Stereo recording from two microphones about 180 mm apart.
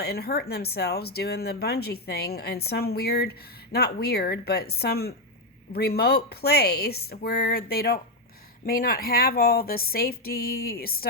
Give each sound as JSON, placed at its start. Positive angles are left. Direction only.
{"t": 0.0, "sound": "speech", "side_deg": 60}